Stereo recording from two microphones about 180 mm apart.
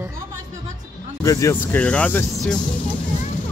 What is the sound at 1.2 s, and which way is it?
Speech, 15° left (ahead or behind).